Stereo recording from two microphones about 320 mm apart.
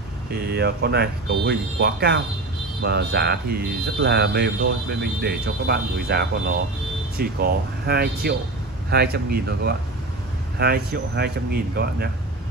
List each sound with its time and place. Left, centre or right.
0.3 s speech: right